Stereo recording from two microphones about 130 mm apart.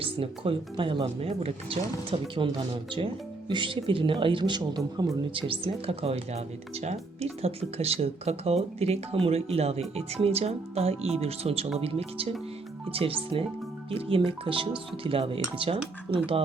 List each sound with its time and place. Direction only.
0.0 s speech: 45° right (ahead or behind)
5.3 s speech: 40° right (ahead or behind)